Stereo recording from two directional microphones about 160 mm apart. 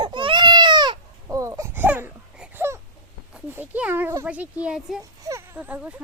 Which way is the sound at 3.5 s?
10° right (ahead or behind).